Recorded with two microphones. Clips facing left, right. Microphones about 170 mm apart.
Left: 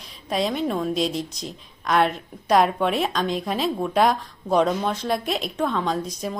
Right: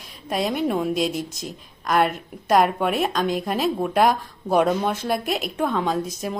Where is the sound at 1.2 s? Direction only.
50° right (ahead or behind).